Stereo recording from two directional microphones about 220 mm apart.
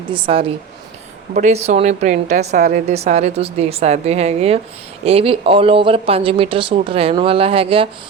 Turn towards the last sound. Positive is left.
turn(degrees=-25)  # may be behind; listen again after turning